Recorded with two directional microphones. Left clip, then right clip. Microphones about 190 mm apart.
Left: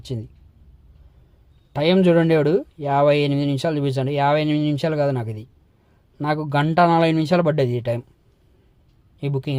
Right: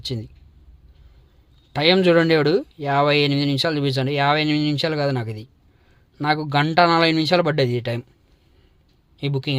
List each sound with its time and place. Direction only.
0.0 s speech: 15° left (ahead or behind)
1.7 s speech: 10° left (ahead or behind)
9.1 s speech: 15° left (ahead or behind)